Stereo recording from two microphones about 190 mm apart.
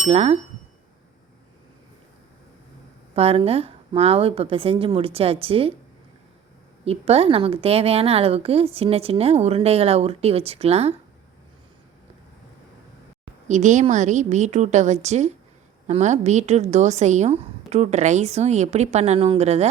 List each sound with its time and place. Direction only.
0.1 s a woman's voice: 35° right (ahead or behind)
3.2 s a woman's voice: 30° right (ahead or behind)
6.8 s a woman's voice: 30° right (ahead or behind)
13.5 s a woman's voice: 40° right (ahead or behind)